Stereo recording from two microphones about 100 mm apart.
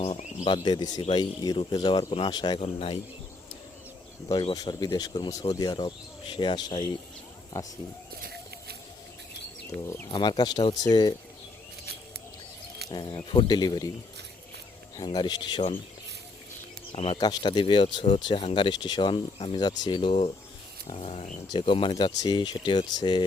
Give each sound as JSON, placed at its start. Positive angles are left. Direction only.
{"t": 0.0, "sound": "speech", "side_deg": 80}
{"t": 0.5, "sound": "speech", "side_deg": 45}
{"t": 2.6, "sound": "speech", "side_deg": 65}
{"t": 4.5, "sound": "speech", "side_deg": 45}
{"t": 7.6, "sound": "speech", "side_deg": 30}
{"t": 9.8, "sound": "speech", "side_deg": 25}
{"t": 10.1, "sound": "speech", "side_deg": 50}
{"t": 12.9, "sound": "speech", "side_deg": 50}
{"t": 14.9, "sound": "speech", "side_deg": 50}
{"t": 16.9, "sound": "speech", "side_deg": 70}
{"t": 17.2, "sound": "speech", "side_deg": 50}
{"t": 20.9, "sound": "speech", "side_deg": 90}
{"t": 21.5, "sound": "speech", "side_deg": 55}